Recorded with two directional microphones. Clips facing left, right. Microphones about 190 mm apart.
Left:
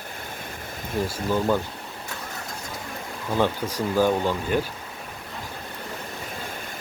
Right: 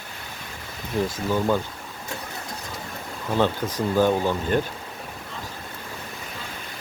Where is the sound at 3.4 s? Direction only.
10° left (ahead or behind).